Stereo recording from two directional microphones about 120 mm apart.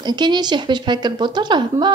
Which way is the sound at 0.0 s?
35° right (ahead or behind).